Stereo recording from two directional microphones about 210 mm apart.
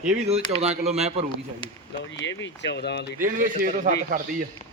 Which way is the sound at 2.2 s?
60° left (ahead or behind).